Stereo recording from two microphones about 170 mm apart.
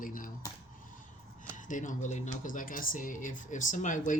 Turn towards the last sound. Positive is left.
turn(degrees=50)  # may be behind; listen again after turning